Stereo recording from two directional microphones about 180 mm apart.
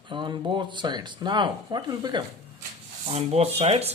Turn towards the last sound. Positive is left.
turn(degrees=-35)  # may be behind; listen again after turning